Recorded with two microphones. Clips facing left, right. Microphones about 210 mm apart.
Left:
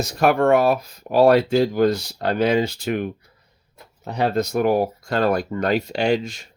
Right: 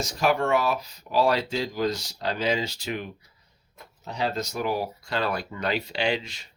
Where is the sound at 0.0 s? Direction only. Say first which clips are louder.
Left 6 dB; 60° left (ahead or behind).